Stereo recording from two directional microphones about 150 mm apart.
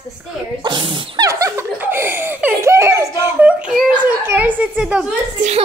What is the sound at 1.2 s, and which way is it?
A woman's voice, 20° right (ahead or behind).